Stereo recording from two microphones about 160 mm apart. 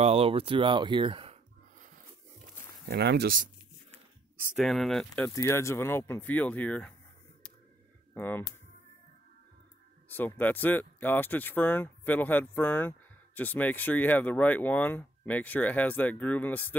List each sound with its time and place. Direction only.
0.0 s speech: 40° right (ahead or behind)
2.9 s speech: 90° right
4.6 s speech: centre (ahead or behind)
5.3 s speech: 15° left (ahead or behind)
8.1 s speech: 10° left (ahead or behind)
10.0 s speech: 10° left (ahead or behind)